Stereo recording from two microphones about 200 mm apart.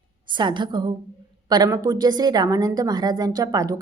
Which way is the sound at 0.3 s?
25° right (ahead or behind).